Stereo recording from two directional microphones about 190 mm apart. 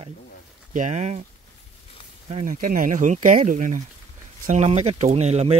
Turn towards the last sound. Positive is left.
turn(degrees=-35)  # may be behind; listen again after turning